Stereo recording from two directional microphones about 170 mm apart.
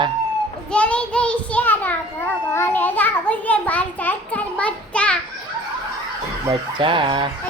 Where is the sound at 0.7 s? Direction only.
5° left (ahead or behind).